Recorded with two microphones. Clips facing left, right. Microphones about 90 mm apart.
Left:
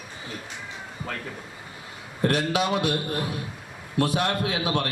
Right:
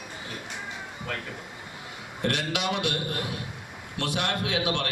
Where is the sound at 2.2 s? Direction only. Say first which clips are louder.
Left 5 dB; 35° left (ahead or behind).